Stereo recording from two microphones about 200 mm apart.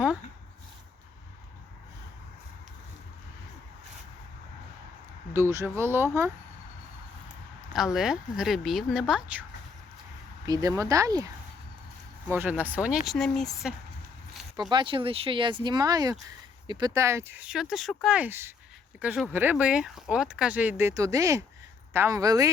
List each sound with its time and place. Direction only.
5.3 s speech: 15° right (ahead or behind)
7.9 s speech: centre (ahead or behind)
10.4 s speech: 20° right (ahead or behind)
12.3 s speech: 10° right (ahead or behind)
14.7 s speech: 25° right (ahead or behind)